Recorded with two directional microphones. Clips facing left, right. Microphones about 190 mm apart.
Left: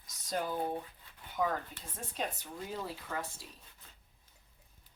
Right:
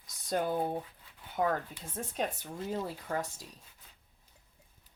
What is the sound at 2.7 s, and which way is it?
Speech, 45° right (ahead or behind).